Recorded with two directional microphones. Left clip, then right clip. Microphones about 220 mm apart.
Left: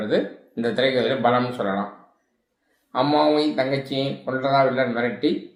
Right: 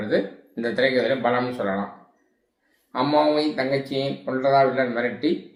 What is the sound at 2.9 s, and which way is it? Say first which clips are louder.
A man's voice: left 1 dB; 15° left (ahead or behind).